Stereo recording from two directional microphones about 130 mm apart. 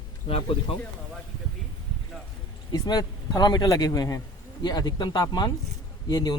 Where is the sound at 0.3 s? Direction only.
45° left (ahead or behind).